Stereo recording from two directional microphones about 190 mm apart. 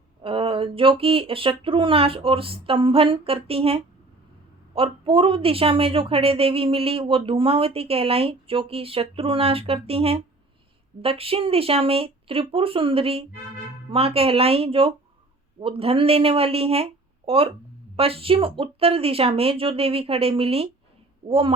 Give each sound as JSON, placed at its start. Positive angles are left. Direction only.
{"t": 0.2, "sound": "a woman's voice", "side_deg": -30}